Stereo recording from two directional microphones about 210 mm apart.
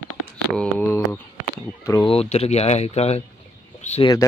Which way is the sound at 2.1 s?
30° left (ahead or behind).